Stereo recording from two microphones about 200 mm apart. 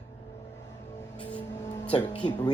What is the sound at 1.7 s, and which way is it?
Speech, 20° left (ahead or behind).